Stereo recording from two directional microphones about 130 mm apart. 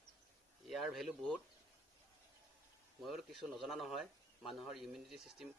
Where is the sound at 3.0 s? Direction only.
Centre (ahead or behind).